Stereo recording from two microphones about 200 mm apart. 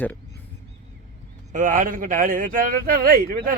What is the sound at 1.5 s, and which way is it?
A man's voice, 40° right (ahead or behind).